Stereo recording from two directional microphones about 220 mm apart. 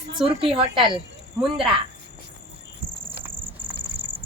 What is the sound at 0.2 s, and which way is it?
Speech, 25° right (ahead or behind).